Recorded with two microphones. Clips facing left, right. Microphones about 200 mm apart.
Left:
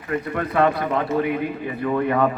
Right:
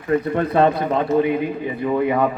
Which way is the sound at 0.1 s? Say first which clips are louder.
Right 5 dB; 30° right (ahead or behind).